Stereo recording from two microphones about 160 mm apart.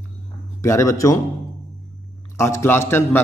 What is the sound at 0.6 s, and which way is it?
Speech, 20° left (ahead or behind).